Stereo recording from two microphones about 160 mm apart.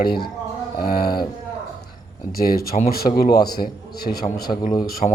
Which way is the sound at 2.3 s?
65° left (ahead or behind).